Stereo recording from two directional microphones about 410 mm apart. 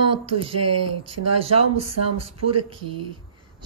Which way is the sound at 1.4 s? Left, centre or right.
Centre.